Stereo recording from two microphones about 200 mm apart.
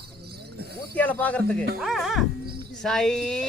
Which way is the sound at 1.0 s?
10° left (ahead or behind).